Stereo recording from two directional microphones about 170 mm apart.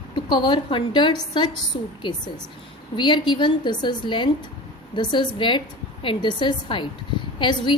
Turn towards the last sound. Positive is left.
turn(degrees=30)  # may be behind; listen again after turning